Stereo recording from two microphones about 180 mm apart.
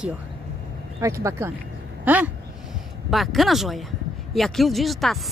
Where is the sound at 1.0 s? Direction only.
15° right (ahead or behind); by 5.1 s centre (ahead or behind).